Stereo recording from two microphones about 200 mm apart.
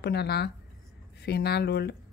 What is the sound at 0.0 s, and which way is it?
Speech, 55° left (ahead or behind).